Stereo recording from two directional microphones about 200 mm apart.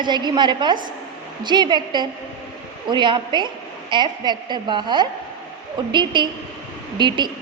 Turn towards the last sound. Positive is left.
turn(degrees=-20)  # may be behind; listen again after turning